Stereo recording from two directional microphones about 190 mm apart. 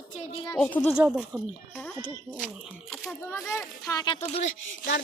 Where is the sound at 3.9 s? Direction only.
20° left (ahead or behind).